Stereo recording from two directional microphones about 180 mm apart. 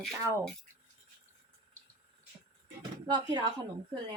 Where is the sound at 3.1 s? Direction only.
25° right (ahead or behind).